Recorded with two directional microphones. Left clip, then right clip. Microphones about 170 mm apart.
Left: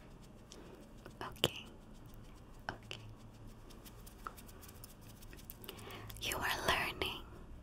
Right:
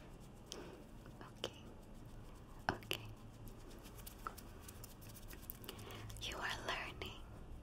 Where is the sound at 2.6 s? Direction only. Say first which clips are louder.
Right 5 dB; 10° right (ahead or behind).